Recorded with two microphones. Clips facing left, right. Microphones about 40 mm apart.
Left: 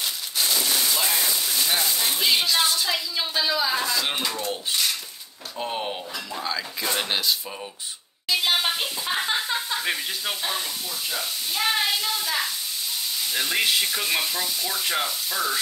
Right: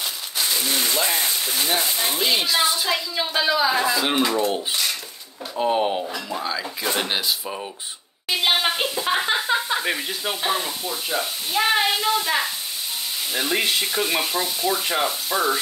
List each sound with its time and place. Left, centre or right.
0.4 s a sound: right
1.1 s a sound: right
1.5 s speech: right
2.3 s speech: centre
2.7 s speech: centre
3.9 s speech: centre
8.3 s a sound: right
9.3 s speech: right
13.3 s speech: centre